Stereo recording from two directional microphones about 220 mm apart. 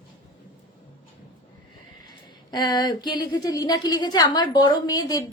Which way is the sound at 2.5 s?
20° left (ahead or behind).